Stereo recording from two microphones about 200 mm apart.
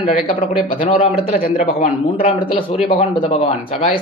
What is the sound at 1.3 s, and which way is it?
Speech, 45° left (ahead or behind).